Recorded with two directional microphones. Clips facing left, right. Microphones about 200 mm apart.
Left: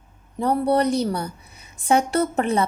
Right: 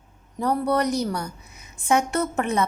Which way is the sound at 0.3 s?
30° left (ahead or behind).